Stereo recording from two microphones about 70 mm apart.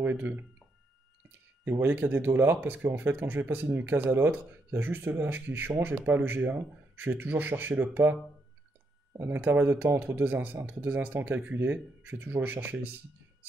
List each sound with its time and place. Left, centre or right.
0.0 s speech: right
1.8 s speech: right
9.2 s speech: right